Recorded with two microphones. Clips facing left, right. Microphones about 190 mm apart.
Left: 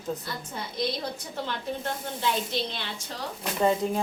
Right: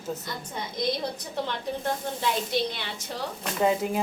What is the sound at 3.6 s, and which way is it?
Speech, 10° right (ahead or behind).